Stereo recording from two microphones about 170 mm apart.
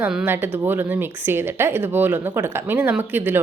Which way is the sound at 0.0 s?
10° right (ahead or behind).